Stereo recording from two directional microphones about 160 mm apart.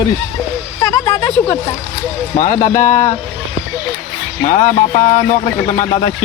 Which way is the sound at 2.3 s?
50° left (ahead or behind).